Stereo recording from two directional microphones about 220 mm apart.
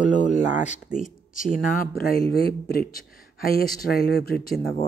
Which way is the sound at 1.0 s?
35° left (ahead or behind).